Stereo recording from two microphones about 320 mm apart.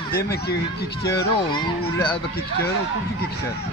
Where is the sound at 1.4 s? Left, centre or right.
Centre.